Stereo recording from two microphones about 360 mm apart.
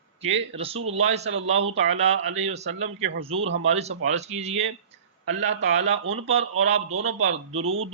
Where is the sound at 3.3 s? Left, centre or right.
Right.